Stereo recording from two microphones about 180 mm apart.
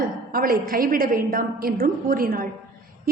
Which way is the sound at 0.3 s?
50° right (ahead or behind).